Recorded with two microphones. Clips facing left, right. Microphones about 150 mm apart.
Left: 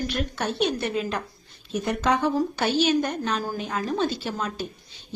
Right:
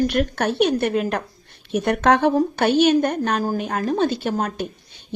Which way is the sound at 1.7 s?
70° right (ahead or behind).